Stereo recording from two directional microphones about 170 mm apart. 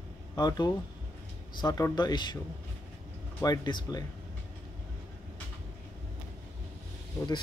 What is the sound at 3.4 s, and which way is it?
Speech, 25° left (ahead or behind).